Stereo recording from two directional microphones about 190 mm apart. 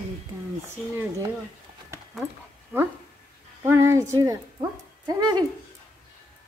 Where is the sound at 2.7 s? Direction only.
10° right (ahead or behind).